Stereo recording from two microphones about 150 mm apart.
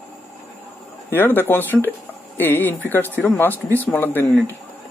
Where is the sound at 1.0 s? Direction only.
15° left (ahead or behind).